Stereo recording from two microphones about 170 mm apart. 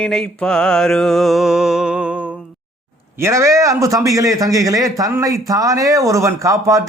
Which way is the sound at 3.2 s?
15° right (ahead or behind).